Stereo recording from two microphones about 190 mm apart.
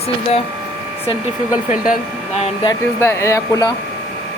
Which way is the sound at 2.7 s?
15° left (ahead or behind).